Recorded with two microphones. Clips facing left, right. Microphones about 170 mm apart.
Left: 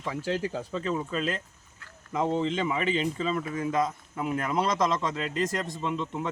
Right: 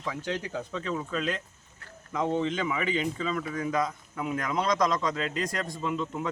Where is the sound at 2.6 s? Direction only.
30° left (ahead or behind).